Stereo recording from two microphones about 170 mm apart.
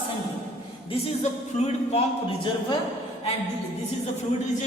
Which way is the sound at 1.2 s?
40° left (ahead or behind).